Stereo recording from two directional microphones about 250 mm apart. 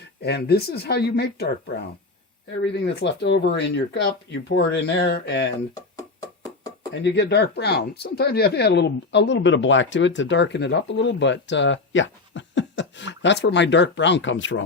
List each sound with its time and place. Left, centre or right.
0.2 s speech: left
2.8 s speech: left
6.9 s speech: left